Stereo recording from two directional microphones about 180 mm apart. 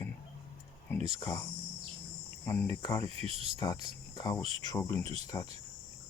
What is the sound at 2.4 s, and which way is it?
Speech, 15° left (ahead or behind).